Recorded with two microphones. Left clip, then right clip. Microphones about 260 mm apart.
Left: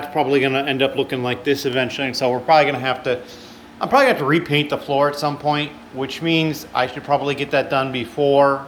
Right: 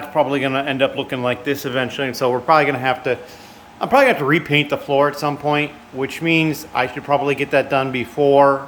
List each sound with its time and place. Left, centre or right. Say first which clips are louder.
0.0 s speech: even; centre